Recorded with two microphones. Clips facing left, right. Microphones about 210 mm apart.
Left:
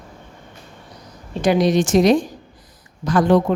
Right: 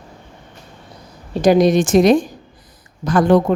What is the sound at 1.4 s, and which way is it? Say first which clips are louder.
A woman's voice: right 4 dB; 45° right (ahead or behind).